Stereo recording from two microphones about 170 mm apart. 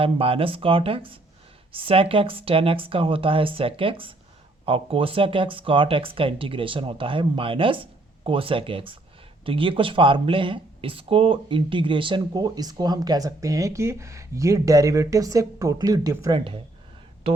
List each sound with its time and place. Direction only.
0.0 s speech: 35° right (ahead or behind)